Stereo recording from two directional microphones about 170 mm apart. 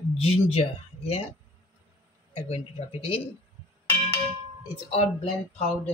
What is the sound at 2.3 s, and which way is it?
Speech, 35° left (ahead or behind).